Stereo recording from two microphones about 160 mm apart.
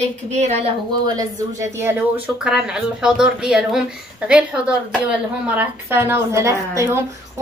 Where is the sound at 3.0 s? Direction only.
5° right (ahead or behind).